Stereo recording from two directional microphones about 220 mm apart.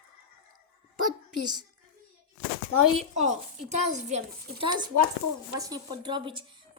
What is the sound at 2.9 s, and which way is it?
A woman's voice, 30° right (ahead or behind).